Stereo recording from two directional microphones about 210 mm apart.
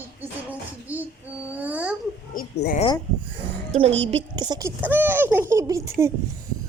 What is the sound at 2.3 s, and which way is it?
Speech, 40° left (ahead or behind).